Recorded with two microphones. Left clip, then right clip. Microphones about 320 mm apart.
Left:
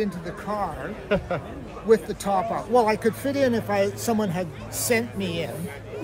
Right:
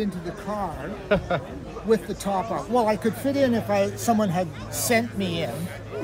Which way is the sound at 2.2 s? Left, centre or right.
Centre.